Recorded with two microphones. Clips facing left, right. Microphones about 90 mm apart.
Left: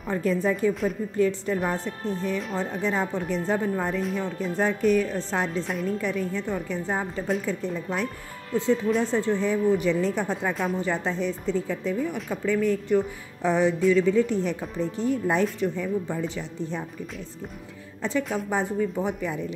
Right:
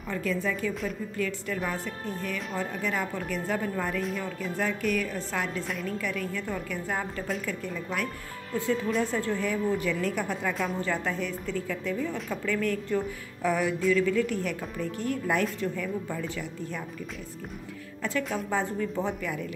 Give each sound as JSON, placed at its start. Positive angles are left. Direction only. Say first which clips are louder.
{"t": 0.1, "sound": "speech", "louder": "left 5 dB", "side_deg": 35}
{"t": 5.6, "sound": "a woman's voice", "louder": "left 5 dB", "side_deg": 0}
{"t": 5.9, "sound": "speech", "louder": "left 4 dB", "side_deg": 25}
{"t": 18.0, "sound": "speech", "louder": "left 3 dB", "side_deg": 25}